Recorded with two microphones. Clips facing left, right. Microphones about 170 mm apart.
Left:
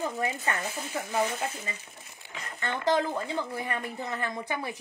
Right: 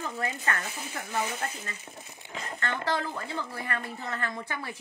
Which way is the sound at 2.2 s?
20° right (ahead or behind).